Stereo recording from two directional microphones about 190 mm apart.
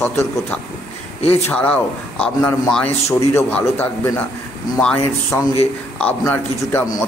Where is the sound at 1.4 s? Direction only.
10° left (ahead or behind).